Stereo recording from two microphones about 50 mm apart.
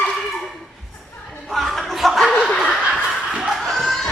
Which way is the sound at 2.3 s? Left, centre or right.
Left.